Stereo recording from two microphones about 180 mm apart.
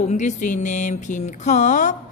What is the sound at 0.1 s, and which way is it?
Speech, 40° left (ahead or behind).